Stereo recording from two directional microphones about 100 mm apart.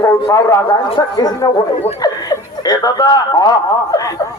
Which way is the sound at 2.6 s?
40° left (ahead or behind).